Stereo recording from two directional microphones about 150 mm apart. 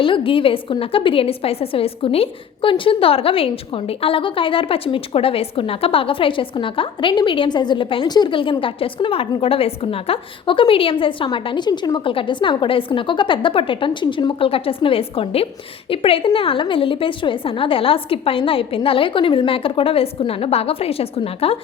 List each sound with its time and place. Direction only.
0.0 s a woman's voice: 35° left (ahead or behind)